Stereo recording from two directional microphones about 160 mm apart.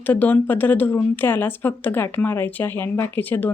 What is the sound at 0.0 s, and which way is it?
Speech, 10° left (ahead or behind).